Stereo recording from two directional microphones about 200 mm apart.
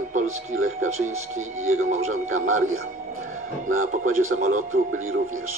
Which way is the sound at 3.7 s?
40° right (ahead or behind).